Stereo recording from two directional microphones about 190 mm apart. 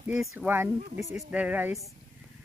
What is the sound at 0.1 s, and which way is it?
A woman's voice, centre (ahead or behind).